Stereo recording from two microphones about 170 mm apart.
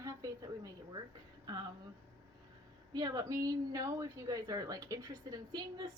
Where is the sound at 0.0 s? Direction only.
20° right (ahead or behind).